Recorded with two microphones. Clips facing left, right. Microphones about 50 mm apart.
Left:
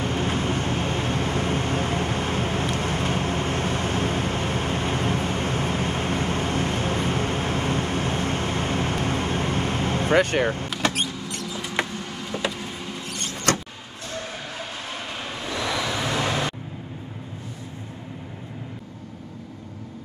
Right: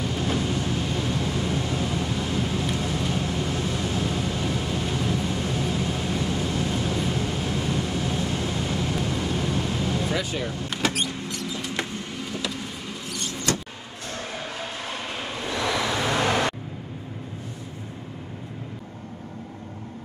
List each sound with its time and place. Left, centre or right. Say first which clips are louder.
0.0 s vehicle: left 1 dB; left
13.1 s vehicle: left 3 dB; left
16.1 s vehicle: right 4 dB; right